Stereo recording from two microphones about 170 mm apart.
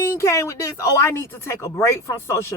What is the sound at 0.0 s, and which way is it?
A man's voice, 15° left (ahead or behind).